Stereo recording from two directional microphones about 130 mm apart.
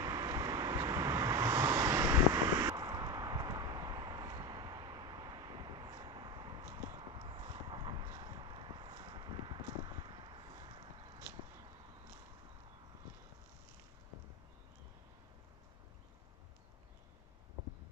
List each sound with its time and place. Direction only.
0.0 s vehicle: 30° right (ahead or behind)